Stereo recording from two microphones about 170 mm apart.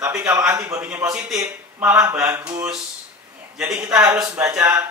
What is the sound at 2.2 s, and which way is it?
Speech, 20° right (ahead or behind).